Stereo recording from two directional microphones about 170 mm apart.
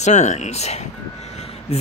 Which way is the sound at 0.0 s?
45° left (ahead or behind).